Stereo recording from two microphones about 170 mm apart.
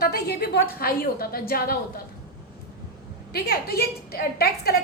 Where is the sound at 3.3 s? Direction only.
65° left (ahead or behind).